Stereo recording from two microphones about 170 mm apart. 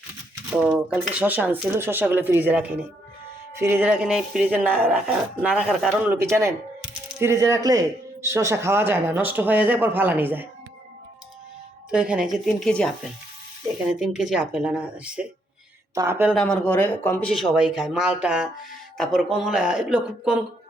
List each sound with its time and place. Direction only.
0.5 s speech: 10° right (ahead or behind)
11.9 s speech: 5° right (ahead or behind)
14.0 s speech: 5° right (ahead or behind)
16.3 s speech: 5° left (ahead or behind)